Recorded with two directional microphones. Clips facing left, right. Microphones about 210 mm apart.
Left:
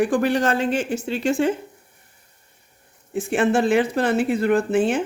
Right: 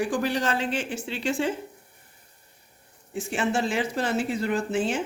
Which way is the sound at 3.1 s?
55° left (ahead or behind).